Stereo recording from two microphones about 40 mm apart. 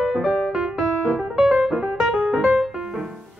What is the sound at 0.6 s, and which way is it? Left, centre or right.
Music, centre.